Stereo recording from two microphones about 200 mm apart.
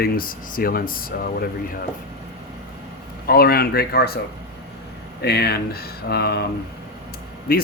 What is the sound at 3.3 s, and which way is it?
Speech, 50° left (ahead or behind).